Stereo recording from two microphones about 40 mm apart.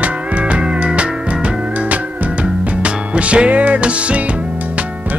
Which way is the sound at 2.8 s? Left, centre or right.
Right.